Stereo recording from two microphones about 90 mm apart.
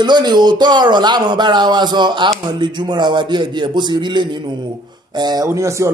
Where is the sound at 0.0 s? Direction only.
55° right (ahead or behind).